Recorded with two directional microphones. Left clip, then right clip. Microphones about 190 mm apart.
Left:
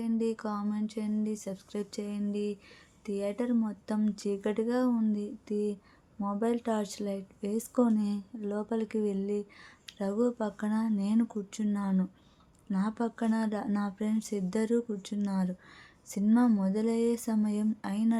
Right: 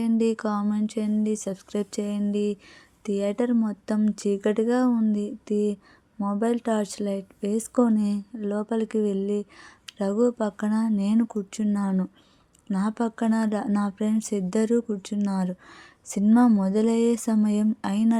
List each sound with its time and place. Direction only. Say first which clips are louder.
0.0 s speech: right 8 dB; 45° right (ahead or behind)